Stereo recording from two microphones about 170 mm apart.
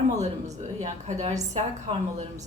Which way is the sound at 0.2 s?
40° right (ahead or behind).